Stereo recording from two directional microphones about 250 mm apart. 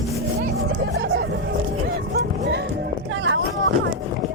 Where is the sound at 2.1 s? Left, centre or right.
Right.